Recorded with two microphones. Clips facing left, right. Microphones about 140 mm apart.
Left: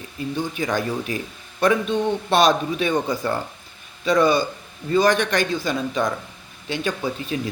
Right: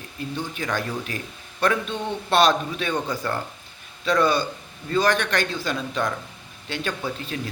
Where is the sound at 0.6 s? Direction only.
20° left (ahead or behind).